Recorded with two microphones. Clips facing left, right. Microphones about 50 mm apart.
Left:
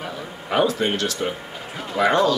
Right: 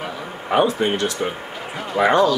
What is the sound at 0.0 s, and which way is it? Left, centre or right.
A man's voice, centre.